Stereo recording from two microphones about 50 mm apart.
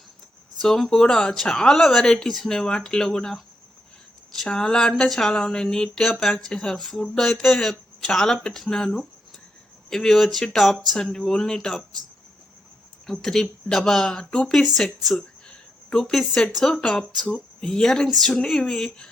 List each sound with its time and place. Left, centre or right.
0.6 s speech: centre
4.4 s speech: centre
13.1 s speech: centre
15.4 s a sound: centre
16.5 s speech: centre
16.8 s speech: left
17.3 s speech: centre